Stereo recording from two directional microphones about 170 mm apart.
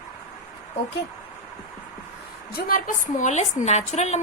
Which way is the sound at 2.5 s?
55° left (ahead or behind).